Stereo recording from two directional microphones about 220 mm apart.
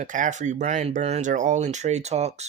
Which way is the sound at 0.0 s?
35° right (ahead or behind).